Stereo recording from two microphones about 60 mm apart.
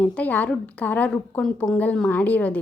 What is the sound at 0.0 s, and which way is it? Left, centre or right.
A woman's voice, left.